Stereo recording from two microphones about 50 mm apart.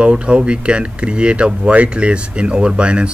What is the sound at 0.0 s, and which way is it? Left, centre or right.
Speech, right.